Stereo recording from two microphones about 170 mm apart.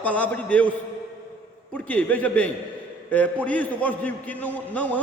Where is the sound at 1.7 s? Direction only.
10° left (ahead or behind).